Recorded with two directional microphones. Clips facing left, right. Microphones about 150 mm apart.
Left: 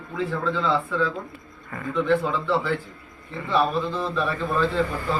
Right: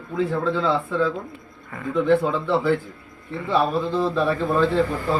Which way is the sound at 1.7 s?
10° right (ahead or behind).